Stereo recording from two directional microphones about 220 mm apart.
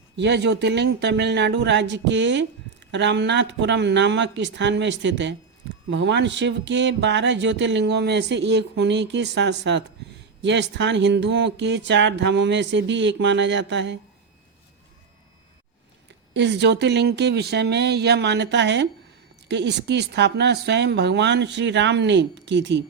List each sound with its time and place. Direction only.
0.2 s speech: 50° right (ahead or behind)
16.3 s speech: 50° right (ahead or behind)